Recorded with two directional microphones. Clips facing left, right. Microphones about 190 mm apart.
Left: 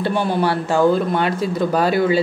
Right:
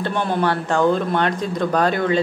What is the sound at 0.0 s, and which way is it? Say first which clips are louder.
Speech: left 2 dB; 10° left (ahead or behind).